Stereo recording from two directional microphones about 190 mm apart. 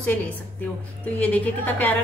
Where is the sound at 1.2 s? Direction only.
10° left (ahead or behind).